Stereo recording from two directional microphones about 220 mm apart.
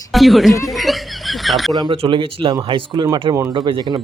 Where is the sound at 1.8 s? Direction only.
20° right (ahead or behind).